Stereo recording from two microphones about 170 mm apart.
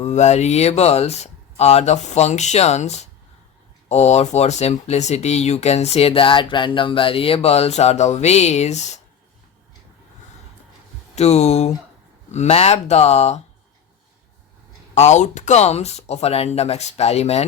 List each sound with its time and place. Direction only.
0.0 s speech: 40° left (ahead or behind)
11.1 s speech: 40° left (ahead or behind)
14.9 s speech: 45° left (ahead or behind)